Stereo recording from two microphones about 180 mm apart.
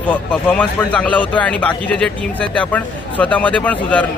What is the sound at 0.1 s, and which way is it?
Speech, 5° left (ahead or behind).